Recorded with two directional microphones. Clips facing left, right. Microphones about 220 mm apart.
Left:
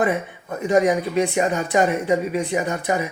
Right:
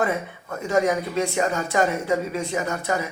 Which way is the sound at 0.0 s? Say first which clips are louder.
Left 3 dB; 15° left (ahead or behind).